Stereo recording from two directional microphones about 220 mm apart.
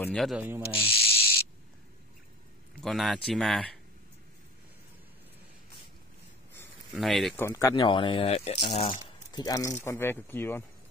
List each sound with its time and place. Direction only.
0.0 s speech: centre (ahead or behind)
2.8 s speech: centre (ahead or behind)
6.9 s speech: centre (ahead or behind)
7.4 s speech: 15° left (ahead or behind)